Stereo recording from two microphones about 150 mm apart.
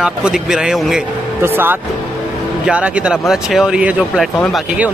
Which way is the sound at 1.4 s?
15° right (ahead or behind).